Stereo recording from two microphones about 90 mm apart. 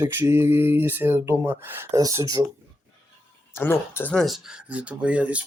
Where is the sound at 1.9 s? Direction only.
40° right (ahead or behind).